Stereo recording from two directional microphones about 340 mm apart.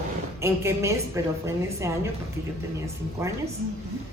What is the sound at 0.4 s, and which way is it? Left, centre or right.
A woman's voice, centre.